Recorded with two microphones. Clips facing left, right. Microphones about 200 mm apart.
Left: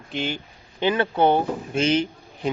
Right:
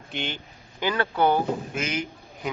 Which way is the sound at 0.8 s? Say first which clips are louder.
Left 4 dB; 20° left (ahead or behind).